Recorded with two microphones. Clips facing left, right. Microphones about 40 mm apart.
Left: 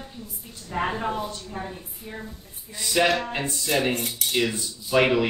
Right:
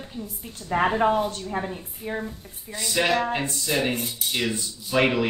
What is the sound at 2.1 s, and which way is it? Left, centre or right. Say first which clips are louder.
Speech: right 8 dB; right.